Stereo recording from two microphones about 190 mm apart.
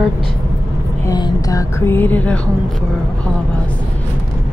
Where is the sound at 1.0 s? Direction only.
20° left (ahead or behind).